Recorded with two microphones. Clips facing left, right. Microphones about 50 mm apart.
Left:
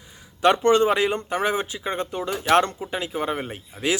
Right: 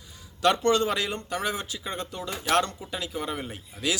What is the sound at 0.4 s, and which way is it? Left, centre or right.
Speech, left.